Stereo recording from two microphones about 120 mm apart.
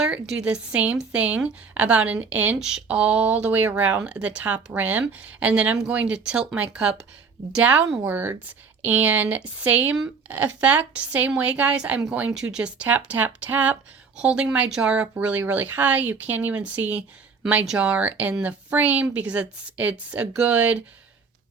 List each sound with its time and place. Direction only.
0.0 s speech: 5° right (ahead or behind)